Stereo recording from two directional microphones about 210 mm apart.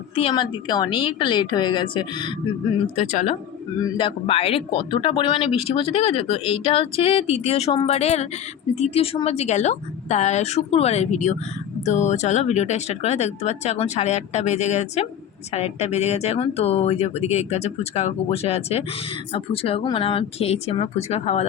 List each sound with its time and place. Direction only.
0.2 s speech: 25° left (ahead or behind)
2.7 s speech: 35° left (ahead or behind)
3.8 s speech: 20° left (ahead or behind)